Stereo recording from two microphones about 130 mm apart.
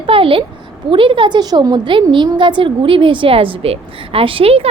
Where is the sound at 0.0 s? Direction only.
45° right (ahead or behind).